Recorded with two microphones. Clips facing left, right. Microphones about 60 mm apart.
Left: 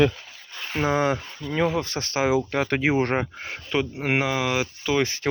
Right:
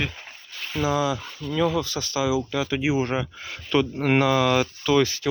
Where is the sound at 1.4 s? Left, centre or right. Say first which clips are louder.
Right 2 dB; left.